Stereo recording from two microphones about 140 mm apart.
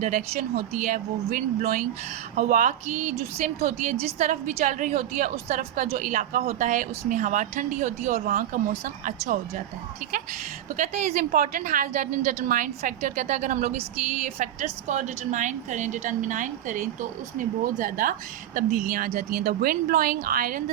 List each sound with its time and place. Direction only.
0.0 s a woman's voice: 65° right (ahead or behind)
3.6 s a woman's voice: 50° right (ahead or behind)
4.3 s a woman's voice: 65° right (ahead or behind)
10.8 s a woman's voice: 50° right (ahead or behind); by 18.1 s 75° right (ahead or behind)
18.5 s speech: 85° right